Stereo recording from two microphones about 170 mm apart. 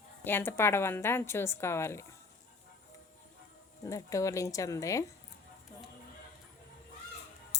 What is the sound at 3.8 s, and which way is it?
Speech, 20° left (ahead or behind).